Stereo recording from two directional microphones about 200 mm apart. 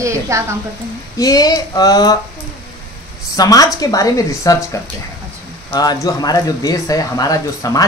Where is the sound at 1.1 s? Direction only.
20° left (ahead or behind).